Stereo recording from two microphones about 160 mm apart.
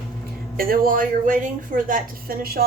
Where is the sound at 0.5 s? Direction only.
65° right (ahead or behind).